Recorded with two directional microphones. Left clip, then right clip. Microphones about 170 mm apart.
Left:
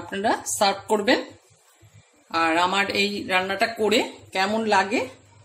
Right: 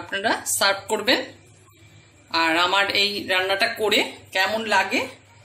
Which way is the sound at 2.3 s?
55° left (ahead or behind).